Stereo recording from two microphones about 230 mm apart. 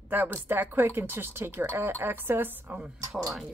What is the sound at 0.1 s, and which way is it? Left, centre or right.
Speech, centre.